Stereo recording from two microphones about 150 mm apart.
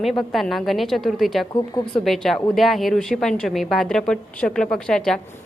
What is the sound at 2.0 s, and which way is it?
A woman's voice, centre (ahead or behind).